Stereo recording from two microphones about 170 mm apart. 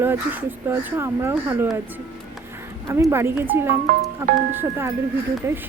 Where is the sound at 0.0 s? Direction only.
10° right (ahead or behind).